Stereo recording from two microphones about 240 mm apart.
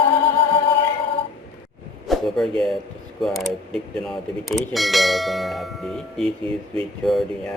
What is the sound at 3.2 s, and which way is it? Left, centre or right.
Speech, centre.